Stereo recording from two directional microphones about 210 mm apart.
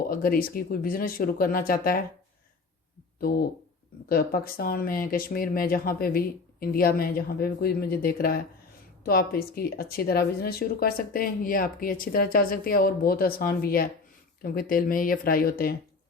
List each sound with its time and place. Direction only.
0.0 s speech: 45° left (ahead or behind)
3.2 s speech: 45° left (ahead or behind)